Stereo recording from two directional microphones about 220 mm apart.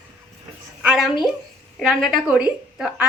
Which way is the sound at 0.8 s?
5° right (ahead or behind).